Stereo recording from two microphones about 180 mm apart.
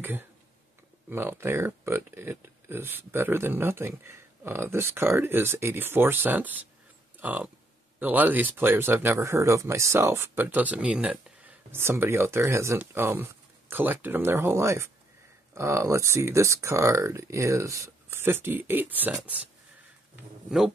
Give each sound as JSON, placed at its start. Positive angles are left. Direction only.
{"t": 1.1, "sound": "speech", "side_deg": -15}
{"t": 20.4, "sound": "speech", "side_deg": -5}